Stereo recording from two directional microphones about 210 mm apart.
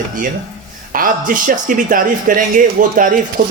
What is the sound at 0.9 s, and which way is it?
Speech, 40° right (ahead or behind).